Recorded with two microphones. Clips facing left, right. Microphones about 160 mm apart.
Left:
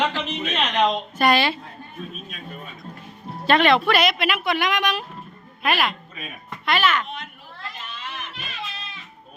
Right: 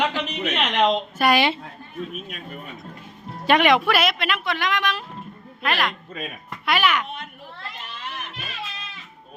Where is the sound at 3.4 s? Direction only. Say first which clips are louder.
Even; 15° right (ahead or behind); by 5.9 s 5° left (ahead or behind).